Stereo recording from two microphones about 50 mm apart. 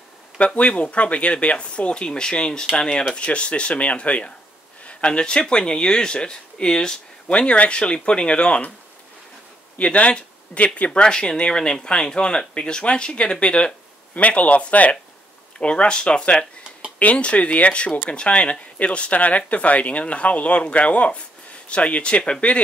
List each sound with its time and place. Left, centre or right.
0.6 s speech: left
9.8 s speech: left